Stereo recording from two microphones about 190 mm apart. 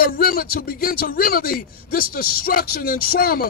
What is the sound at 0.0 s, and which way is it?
A man's voice, 50° left (ahead or behind).